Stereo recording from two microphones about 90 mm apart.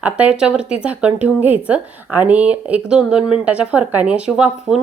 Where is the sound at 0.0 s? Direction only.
15° right (ahead or behind).